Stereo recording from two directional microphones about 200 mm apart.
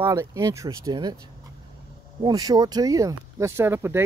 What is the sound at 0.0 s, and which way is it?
Speech, 15° right (ahead or behind).